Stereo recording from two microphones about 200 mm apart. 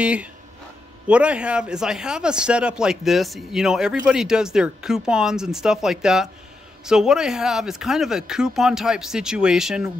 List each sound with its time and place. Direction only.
0.0 s speech: 5° right (ahead or behind)